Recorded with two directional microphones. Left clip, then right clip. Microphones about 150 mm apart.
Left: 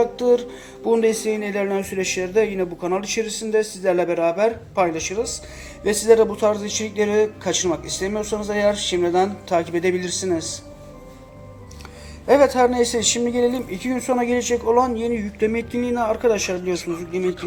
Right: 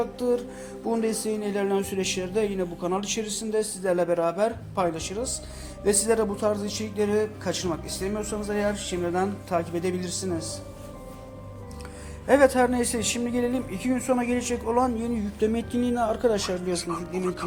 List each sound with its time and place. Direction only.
0.0 s a man's voice: 45° right (ahead or behind)
12.3 s speech: 45° right (ahead or behind)
16.7 s speech: 5° left (ahead or behind)